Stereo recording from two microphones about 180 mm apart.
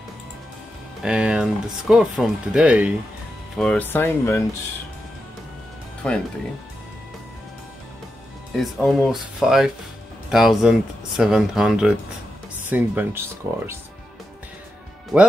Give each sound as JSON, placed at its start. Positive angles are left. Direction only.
{"t": 1.0, "sound": "speech", "side_deg": -5}
{"t": 3.5, "sound": "speech", "side_deg": 5}
{"t": 6.0, "sound": "speech", "side_deg": 5}
{"t": 8.5, "sound": "speech", "side_deg": 0}